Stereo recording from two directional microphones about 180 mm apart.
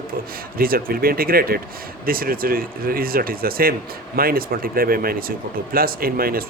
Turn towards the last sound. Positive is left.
turn(degrees=-55)  # may be behind; listen again after turning